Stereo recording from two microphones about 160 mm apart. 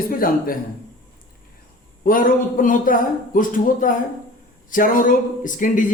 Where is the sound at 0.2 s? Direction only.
65° left (ahead or behind).